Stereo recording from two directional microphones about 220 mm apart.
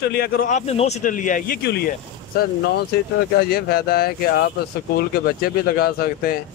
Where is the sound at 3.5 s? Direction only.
45° left (ahead or behind).